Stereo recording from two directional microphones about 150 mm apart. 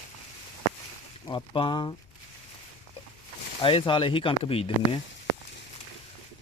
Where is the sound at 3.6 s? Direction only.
35° left (ahead or behind).